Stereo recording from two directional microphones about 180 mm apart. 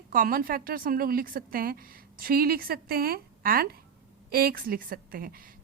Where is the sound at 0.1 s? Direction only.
50° right (ahead or behind).